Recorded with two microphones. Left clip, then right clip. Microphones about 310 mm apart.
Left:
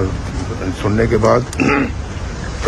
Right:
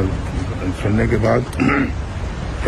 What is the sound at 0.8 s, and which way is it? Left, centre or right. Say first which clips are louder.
Speech: left 5 dB; centre.